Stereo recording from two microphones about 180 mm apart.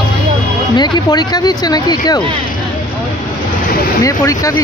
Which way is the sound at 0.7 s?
25° left (ahead or behind).